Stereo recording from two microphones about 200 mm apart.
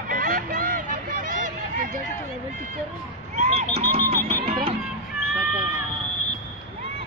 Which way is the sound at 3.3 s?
30° right (ahead or behind).